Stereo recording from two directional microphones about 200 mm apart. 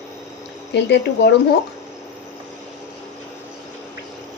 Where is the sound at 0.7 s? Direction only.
55° left (ahead or behind).